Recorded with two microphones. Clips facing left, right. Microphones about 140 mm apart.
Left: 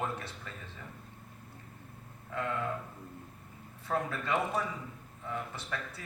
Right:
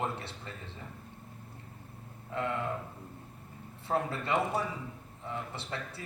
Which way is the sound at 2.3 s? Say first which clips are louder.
Right 2 dB; 25° right (ahead or behind).